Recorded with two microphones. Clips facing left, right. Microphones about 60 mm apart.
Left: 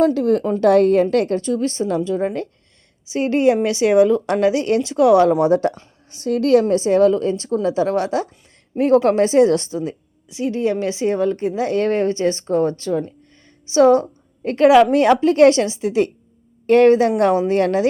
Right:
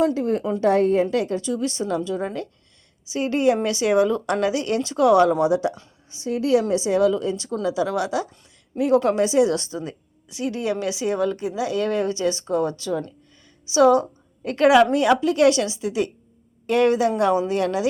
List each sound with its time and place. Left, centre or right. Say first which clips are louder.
0.1 s a woman's voice: left 5 dB; left
1.1 s speech: left 5 dB; left
5.4 s a woman's voice: left 4 dB; left
6.1 s a woman's voice: left 5 dB; left
9.8 s speech: left 7 dB; left
15.2 s speech: left 5 dB; left